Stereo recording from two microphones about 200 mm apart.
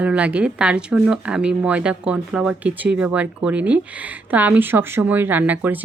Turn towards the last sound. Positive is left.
turn(degrees=-10)  # may be behind; listen again after turning